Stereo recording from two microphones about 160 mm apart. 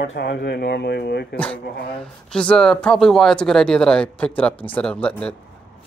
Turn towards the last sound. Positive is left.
turn(degrees=5)  # may be behind; listen again after turning